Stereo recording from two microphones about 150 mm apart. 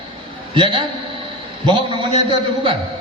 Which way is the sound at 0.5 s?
35° right (ahead or behind).